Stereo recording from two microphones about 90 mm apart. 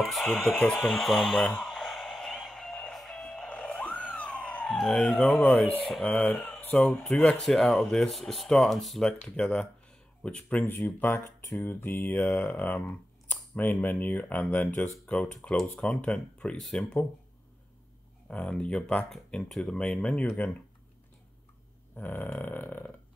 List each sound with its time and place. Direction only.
0.0 s speech: centre (ahead or behind)
0.7 s radio: centre (ahead or behind)
4.1 s a sound: 15° left (ahead or behind)
6.0 s speech: 15° left (ahead or behind)
10.6 s speech: 25° left (ahead or behind); by 17.0 s 10° left (ahead or behind)
18.3 s speech: 15° left (ahead or behind)
21.9 s speech: 20° left (ahead or behind)